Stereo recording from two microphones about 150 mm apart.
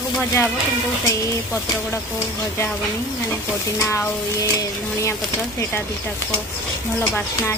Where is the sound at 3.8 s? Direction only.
20° left (ahead or behind).